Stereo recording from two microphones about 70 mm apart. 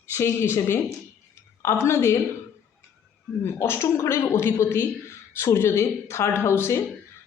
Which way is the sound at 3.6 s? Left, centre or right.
Left.